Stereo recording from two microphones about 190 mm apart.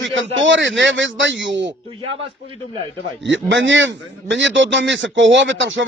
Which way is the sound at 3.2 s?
75° right (ahead or behind).